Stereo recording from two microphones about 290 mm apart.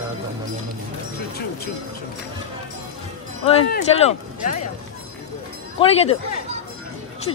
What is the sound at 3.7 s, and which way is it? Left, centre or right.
Speech, left.